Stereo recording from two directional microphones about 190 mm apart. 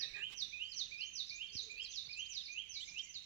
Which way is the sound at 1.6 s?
35° left (ahead or behind).